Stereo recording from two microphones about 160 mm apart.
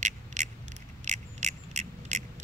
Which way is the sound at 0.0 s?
50° right (ahead or behind).